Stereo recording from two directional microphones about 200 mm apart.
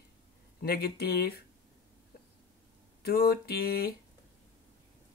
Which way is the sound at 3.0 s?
50° left (ahead or behind).